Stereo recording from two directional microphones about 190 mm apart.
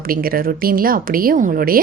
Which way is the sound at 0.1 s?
50° right (ahead or behind).